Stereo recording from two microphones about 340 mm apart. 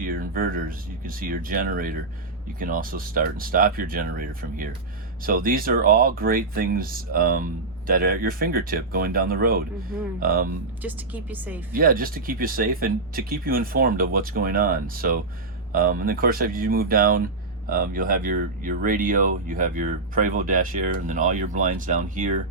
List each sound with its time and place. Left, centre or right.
0.0 s a sound: right
1.0 s speech: right
10.8 s speech: centre
11.7 s speech: right